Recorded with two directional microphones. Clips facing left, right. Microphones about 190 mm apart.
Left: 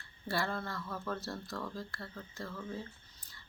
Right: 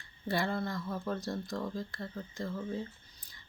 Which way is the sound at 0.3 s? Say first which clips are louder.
Right 3 dB; 15° right (ahead or behind).